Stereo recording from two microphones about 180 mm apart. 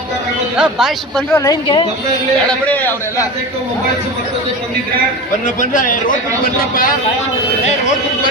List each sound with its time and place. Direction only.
0.5 s speech: 5° right (ahead or behind)
1.3 s a man's voice: 15° left (ahead or behind)
5.5 s speech: 45° left (ahead or behind)